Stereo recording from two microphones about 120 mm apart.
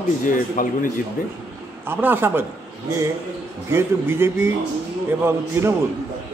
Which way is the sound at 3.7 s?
20° right (ahead or behind).